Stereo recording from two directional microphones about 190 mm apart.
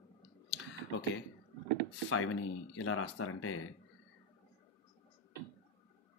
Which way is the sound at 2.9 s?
90° left.